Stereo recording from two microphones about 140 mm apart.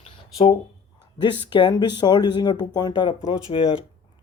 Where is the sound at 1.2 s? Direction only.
35° left (ahead or behind).